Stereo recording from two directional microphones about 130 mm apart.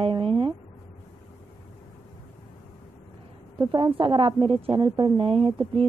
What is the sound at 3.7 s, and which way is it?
A woman's voice, 40° right (ahead or behind).